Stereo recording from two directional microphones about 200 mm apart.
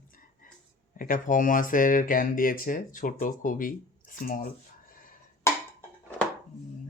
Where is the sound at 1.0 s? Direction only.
45° left (ahead or behind).